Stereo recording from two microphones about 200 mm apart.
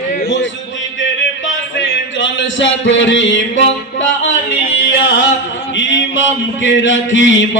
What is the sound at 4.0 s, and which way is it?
Music, 70° left (ahead or behind).